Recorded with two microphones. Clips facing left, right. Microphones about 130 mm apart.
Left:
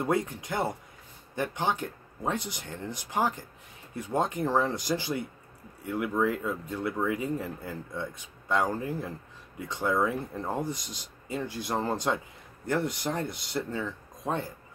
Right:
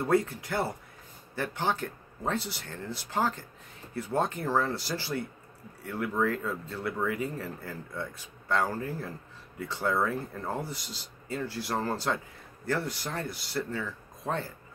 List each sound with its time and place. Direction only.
0.0 s speech: 20° left (ahead or behind)